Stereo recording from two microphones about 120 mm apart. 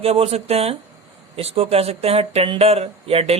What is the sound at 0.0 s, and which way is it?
Speech, 55° right (ahead or behind).